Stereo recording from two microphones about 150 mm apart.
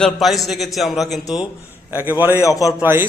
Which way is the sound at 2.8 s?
15° right (ahead or behind).